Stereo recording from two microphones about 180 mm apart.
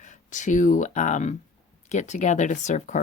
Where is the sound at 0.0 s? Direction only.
45° left (ahead or behind).